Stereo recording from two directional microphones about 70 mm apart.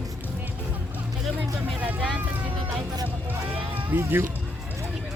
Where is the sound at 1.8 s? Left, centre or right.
Right.